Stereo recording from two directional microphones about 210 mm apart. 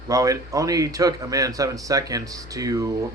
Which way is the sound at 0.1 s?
15° right (ahead or behind).